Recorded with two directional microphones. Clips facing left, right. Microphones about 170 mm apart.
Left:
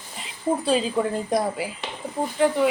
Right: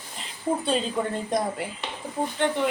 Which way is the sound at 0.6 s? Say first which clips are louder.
Left 4 dB; 5° left (ahead or behind).